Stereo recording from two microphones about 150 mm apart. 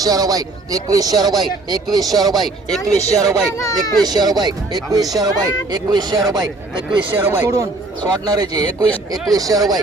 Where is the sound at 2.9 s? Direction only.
45° left (ahead or behind).